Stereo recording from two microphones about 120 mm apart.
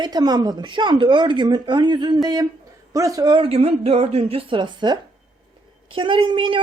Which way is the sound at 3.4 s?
55° right (ahead or behind).